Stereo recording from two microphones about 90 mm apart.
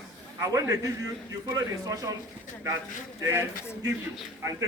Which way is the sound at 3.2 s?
25° right (ahead or behind).